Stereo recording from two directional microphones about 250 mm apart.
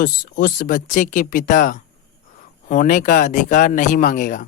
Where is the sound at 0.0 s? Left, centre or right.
Left.